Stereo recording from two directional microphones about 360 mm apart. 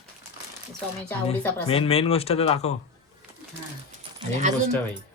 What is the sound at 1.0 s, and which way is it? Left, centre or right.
Speech, centre.